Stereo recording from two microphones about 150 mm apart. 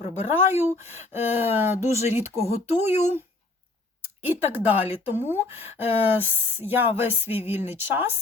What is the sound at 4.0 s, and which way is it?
Speech, 15° right (ahead or behind).